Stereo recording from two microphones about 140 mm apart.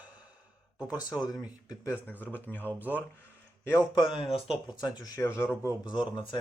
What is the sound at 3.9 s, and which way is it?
Speech, 35° left (ahead or behind).